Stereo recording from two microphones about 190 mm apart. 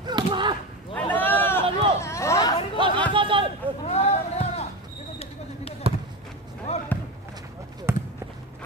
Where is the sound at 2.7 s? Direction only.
25° right (ahead or behind).